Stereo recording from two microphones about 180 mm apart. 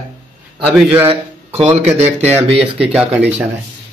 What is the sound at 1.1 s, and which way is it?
Speech, 35° right (ahead or behind).